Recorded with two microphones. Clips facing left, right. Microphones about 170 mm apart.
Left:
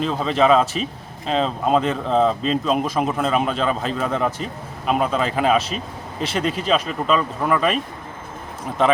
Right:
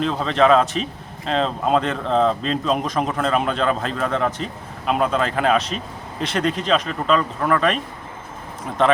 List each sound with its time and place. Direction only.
0.0 s speech: 5° left (ahead or behind)
8.8 s speech: 5° left (ahead or behind)